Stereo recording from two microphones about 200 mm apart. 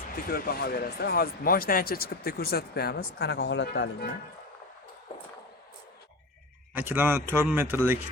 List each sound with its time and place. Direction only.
0.3 s speech: 50° left (ahead or behind)
6.7 s speech: 10° right (ahead or behind)